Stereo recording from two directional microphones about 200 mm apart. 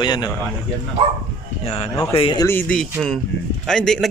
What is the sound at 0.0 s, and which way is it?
Speech, 20° left (ahead or behind).